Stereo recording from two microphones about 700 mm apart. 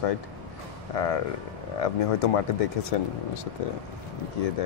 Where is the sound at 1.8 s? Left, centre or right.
Left.